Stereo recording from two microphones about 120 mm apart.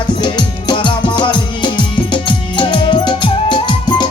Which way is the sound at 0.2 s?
40° left (ahead or behind).